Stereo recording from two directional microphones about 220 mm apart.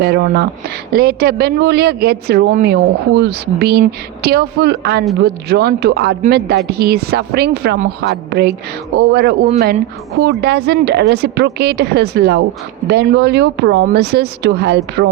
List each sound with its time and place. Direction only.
0.0 s speech: 45° right (ahead or behind)